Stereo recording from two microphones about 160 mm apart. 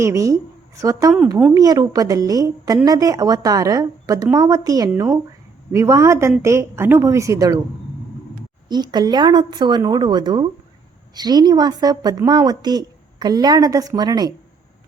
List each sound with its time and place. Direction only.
0.0 s a woman's voice: 20° right (ahead or behind)
8.7 s a woman's voice: 25° right (ahead or behind)